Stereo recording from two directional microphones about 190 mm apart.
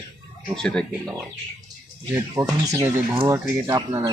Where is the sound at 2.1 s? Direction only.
20° right (ahead or behind).